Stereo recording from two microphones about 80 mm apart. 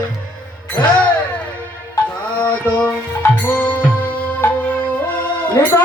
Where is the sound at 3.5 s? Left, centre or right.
Centre.